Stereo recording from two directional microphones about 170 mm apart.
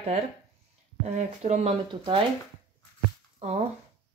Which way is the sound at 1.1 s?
40° right (ahead or behind).